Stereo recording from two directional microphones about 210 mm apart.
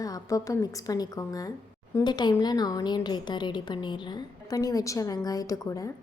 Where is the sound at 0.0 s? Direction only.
15° left (ahead or behind).